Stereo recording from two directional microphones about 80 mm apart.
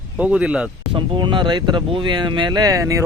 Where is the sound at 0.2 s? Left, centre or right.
Centre.